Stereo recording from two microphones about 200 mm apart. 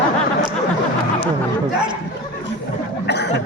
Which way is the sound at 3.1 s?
60° left (ahead or behind).